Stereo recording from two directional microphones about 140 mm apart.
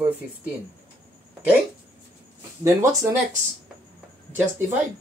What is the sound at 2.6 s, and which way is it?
Speech, 20° right (ahead or behind).